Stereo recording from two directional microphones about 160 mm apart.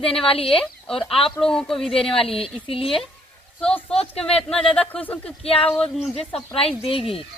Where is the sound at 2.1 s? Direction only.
35° left (ahead or behind).